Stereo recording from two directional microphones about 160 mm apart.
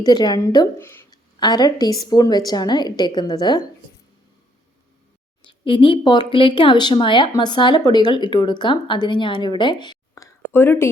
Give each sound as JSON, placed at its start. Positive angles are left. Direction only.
{"t": 0.0, "sound": "a woman's voice", "side_deg": 25}
{"t": 1.4, "sound": "speech", "side_deg": 25}
{"t": 5.5, "sound": "speech", "side_deg": 30}